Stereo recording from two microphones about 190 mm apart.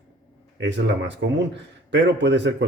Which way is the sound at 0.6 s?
70° right (ahead or behind).